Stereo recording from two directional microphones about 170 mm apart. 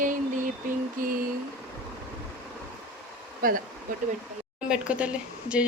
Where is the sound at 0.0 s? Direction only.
50° right (ahead or behind).